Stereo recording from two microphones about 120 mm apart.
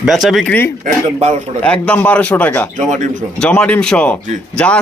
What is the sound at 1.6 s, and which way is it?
A man's voice, 10° left (ahead or behind).